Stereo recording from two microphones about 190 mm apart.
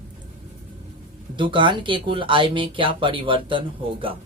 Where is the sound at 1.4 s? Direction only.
25° right (ahead or behind).